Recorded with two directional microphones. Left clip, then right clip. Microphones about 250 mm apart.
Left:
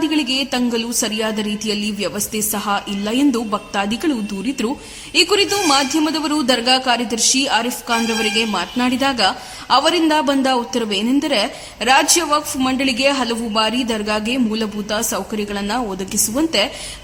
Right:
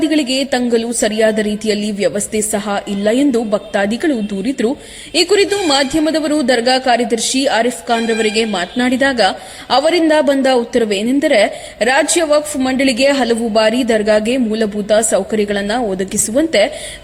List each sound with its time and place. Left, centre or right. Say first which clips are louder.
0.0 s a man's voice: right 3 dB; centre